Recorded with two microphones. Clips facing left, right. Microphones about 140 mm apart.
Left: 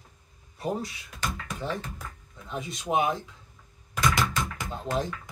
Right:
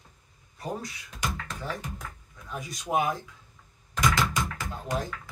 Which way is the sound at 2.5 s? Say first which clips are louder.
Left 1 dB; 25° left (ahead or behind).